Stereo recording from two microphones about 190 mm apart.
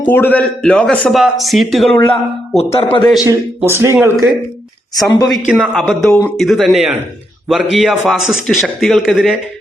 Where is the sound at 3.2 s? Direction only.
15° right (ahead or behind).